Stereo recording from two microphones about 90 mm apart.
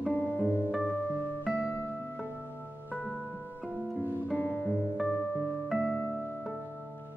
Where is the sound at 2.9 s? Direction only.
20° left (ahead or behind).